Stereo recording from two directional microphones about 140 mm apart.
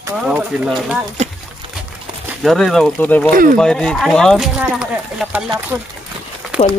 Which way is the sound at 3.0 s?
10° left (ahead or behind).